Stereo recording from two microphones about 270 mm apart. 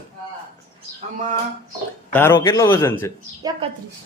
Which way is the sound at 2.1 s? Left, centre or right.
Centre.